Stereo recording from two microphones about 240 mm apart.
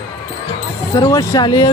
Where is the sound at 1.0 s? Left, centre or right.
Centre.